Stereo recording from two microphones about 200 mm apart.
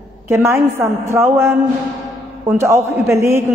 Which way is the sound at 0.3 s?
15° right (ahead or behind).